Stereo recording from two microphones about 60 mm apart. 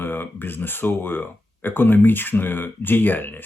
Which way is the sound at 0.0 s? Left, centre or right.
Left.